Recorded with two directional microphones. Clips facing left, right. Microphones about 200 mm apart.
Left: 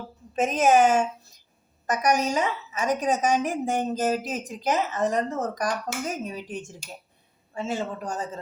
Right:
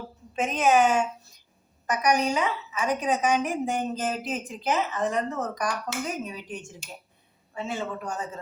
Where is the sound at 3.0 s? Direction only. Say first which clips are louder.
Left 1 dB; 40° left (ahead or behind).